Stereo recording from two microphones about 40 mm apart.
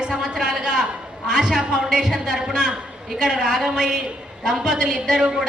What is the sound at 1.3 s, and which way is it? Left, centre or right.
A man's voice, centre.